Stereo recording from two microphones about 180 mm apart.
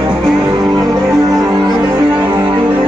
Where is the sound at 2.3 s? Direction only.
25° right (ahead or behind).